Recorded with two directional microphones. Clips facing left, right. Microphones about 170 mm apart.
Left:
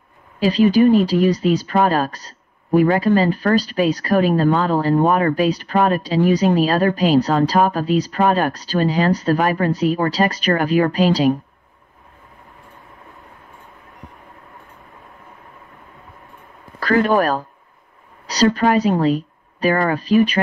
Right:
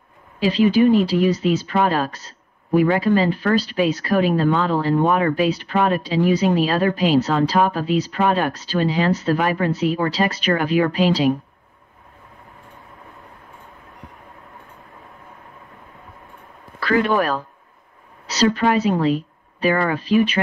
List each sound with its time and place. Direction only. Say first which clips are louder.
0.4 s speech: left 2 dB; 45° left (ahead or behind)
16.8 s a woman's voice: left 2 dB; 45° left (ahead or behind)